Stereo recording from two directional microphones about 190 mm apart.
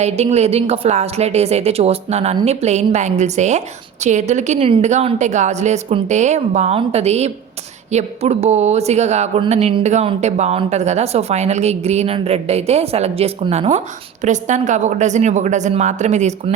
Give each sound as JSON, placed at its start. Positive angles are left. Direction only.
{"t": 0.0, "sound": "speech", "side_deg": -35}